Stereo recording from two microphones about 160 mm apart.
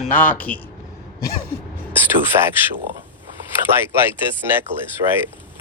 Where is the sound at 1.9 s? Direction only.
15° right (ahead or behind).